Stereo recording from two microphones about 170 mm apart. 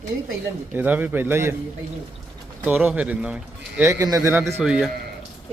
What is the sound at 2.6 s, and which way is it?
Speech, 10° right (ahead or behind).